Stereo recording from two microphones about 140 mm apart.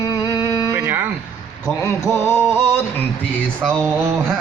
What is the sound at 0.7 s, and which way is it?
Speech, 15° right (ahead or behind).